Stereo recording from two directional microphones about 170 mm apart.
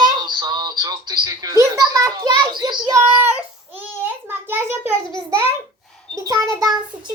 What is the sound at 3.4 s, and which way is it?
A child's voice, 10° right (ahead or behind).